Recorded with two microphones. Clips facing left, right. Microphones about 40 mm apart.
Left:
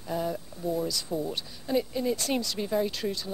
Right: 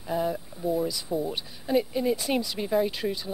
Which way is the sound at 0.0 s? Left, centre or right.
Centre.